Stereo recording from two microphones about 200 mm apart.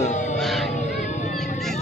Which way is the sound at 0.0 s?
35° left (ahead or behind).